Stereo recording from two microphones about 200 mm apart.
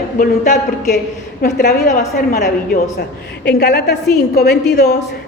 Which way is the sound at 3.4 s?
55° left (ahead or behind).